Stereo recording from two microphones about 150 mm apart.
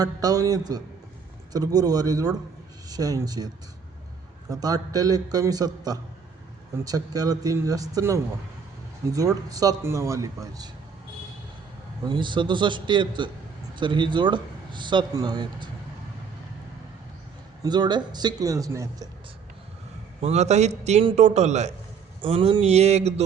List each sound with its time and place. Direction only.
0.0 s a man's voice: 25° right (ahead or behind)
12.0 s speech: 30° right (ahead or behind)
17.6 s a man's voice: 30° right (ahead or behind)
20.2 s a man's voice: 50° right (ahead or behind)
22.2 s a man's voice: 35° right (ahead or behind)